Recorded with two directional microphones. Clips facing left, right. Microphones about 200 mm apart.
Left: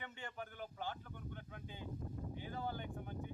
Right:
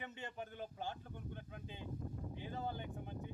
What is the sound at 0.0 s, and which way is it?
Speech, 20° right (ahead or behind).